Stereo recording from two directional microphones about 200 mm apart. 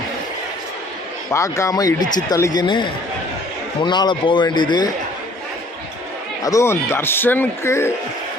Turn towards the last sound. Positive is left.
turn(degrees=10)  # may be behind; listen again after turning